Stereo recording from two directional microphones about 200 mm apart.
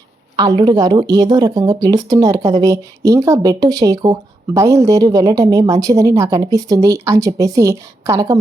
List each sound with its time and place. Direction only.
0.6 s speech: 20° right (ahead or behind)